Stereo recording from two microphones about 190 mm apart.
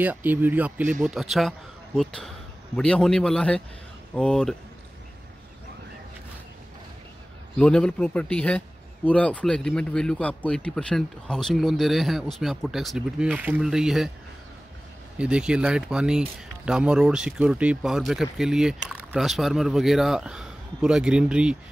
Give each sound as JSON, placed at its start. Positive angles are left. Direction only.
{"t": 0.0, "sound": "a man's voice", "side_deg": -10}
{"t": 7.5, "sound": "a man's voice", "side_deg": 5}
{"t": 15.1, "sound": "a man's voice", "side_deg": -5}